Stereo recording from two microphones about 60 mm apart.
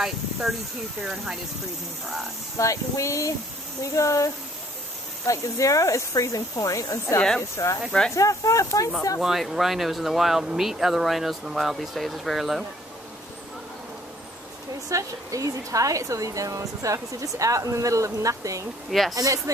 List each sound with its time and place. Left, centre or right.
0.0 s speech: centre
2.5 s speech: left
9.2 s speech: centre
14.9 s a woman's voice: right
18.9 s speech: centre
19.1 s a woman's voice: right